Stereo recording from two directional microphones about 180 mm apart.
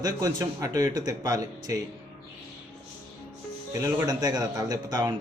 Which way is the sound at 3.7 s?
15° right (ahead or behind).